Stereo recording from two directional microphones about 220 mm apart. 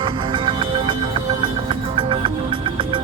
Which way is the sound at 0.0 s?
20° right (ahead or behind).